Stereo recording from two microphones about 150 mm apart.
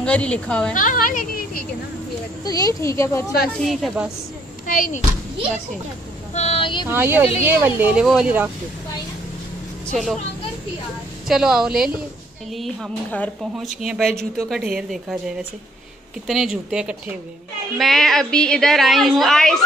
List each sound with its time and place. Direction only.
0.0 s a woman's voice: 5° left (ahead or behind)
0.7 s a woman's voice: 65° left (ahead or behind)
2.4 s speech: 25° left (ahead or behind)
3.5 s a woman's voice: 5° left (ahead or behind)
4.6 s speech: 65° left (ahead or behind)
6.3 s vehicle: 45° left (ahead or behind)
6.9 s speech: 15° right (ahead or behind)
9.8 s a woman's voice: 5° left (ahead or behind)
11.2 s a woman's voice: 5° right (ahead or behind)